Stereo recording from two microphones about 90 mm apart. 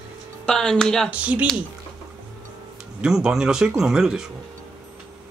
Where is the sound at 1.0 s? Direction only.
15° right (ahead or behind).